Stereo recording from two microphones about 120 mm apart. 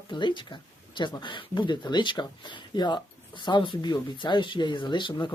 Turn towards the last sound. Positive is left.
turn(degrees=40)  # may be behind; listen again after turning